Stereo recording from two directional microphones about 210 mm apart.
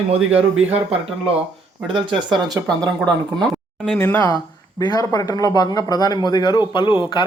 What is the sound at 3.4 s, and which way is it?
A man's voice, centre (ahead or behind).